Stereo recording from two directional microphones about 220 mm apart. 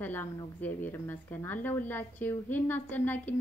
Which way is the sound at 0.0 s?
10° left (ahead or behind).